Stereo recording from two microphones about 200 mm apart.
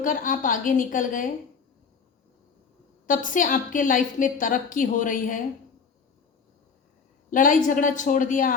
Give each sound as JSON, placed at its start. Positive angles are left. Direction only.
{"t": 0.0, "sound": "a woman's voice", "side_deg": 40}
{"t": 3.1, "sound": "a woman's voice", "side_deg": 40}
{"t": 7.3, "sound": "a woman's voice", "side_deg": 40}